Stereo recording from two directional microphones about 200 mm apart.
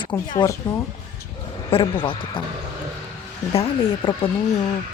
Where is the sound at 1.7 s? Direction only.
25° left (ahead or behind).